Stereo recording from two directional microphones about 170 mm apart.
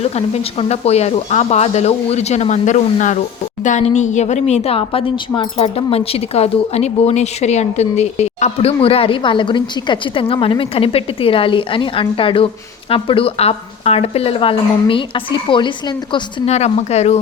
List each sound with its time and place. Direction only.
0.0 s speech: 35° left (ahead or behind)
16.5 s speech: 40° left (ahead or behind)